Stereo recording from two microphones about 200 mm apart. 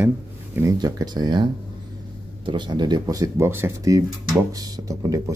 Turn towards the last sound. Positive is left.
turn(degrees=-15)  # may be behind; listen again after turning